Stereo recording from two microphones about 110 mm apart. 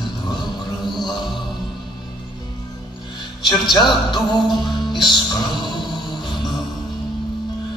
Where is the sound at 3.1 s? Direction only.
40° left (ahead or behind).